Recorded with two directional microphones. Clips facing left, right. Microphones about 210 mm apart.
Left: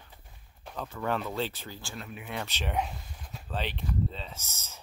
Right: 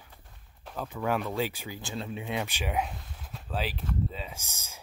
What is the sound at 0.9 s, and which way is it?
Speech, 10° right (ahead or behind).